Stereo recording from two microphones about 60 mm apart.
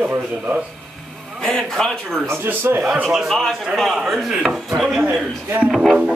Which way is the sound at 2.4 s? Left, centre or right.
Right.